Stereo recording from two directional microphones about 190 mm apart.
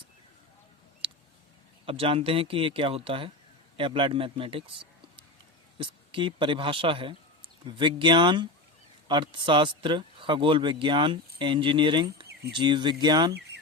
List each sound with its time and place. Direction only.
1.0 s a sound: 25° right (ahead or behind)
1.9 s speech: 30° right (ahead or behind)
5.7 s speech: 25° right (ahead or behind)